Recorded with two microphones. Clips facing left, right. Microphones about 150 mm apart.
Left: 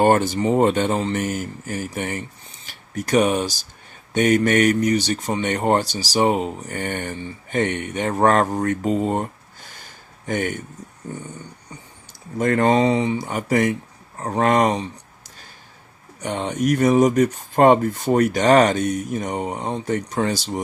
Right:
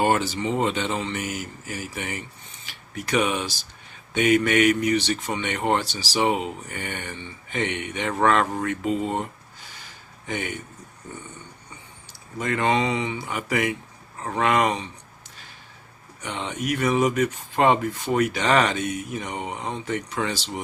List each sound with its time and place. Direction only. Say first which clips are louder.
0.0 s speech: left 5 dB; 50° left (ahead or behind)
12.4 s speech: left 6 dB; 40° left (ahead or behind)
16.2 s speech: left 7 dB; 45° left (ahead or behind)